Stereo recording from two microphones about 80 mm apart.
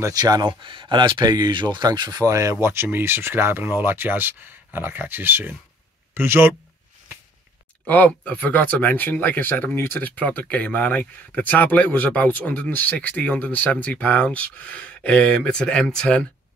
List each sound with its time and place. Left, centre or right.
0.1 s speech: right
1.9 s speech: right
2.6 s speech: right
7.8 s speech: centre